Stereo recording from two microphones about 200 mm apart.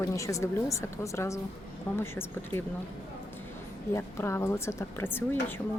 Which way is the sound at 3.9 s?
15° left (ahead or behind).